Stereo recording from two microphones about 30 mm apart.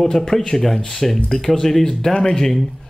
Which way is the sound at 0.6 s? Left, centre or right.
Centre.